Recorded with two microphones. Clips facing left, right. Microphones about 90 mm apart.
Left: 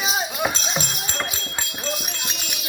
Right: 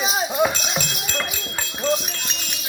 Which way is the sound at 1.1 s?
20° left (ahead or behind).